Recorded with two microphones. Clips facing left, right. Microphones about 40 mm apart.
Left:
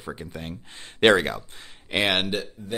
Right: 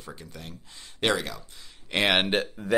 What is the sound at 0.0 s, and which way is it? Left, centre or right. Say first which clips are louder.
Speech: left 7 dB; left.